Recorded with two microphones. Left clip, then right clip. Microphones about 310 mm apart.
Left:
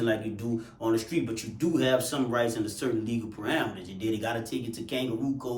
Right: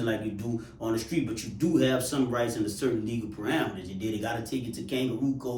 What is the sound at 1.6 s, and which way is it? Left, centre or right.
Speech, centre.